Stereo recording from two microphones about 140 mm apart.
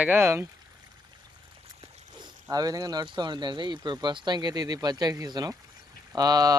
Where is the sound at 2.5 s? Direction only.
25° right (ahead or behind).